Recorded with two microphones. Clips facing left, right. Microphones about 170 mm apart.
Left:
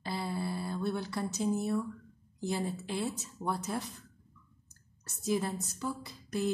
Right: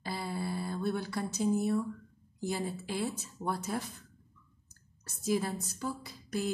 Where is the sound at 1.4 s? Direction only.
Centre (ahead or behind).